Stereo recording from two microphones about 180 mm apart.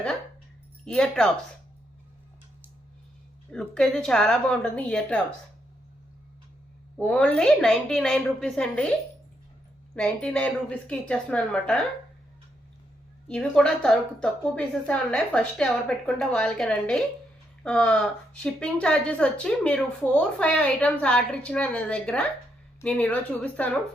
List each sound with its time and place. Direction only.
0.9 s speech: 5° left (ahead or behind)
3.5 s speech: 5° left (ahead or behind)
7.0 s speech: 5° left (ahead or behind)
9.9 s a woman's voice: 5° left (ahead or behind)
13.2 s a woman's voice: 5° left (ahead or behind)